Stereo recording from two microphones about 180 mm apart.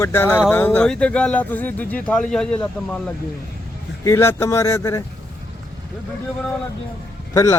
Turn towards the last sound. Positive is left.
turn(degrees=15)  # may be behind; listen again after turning